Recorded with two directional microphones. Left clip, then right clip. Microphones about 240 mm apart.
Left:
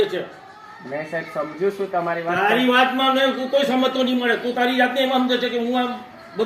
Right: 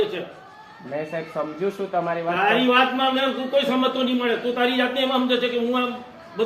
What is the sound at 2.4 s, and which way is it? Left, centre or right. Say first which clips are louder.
A man's voice: left 1 dB; left.